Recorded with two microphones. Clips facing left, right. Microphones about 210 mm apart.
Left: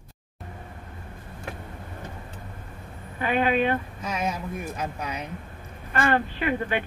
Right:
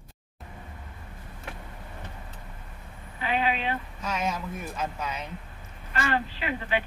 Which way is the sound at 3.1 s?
50° left (ahead or behind).